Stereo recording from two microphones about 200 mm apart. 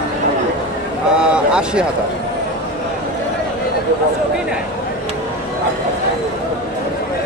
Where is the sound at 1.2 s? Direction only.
5° right (ahead or behind).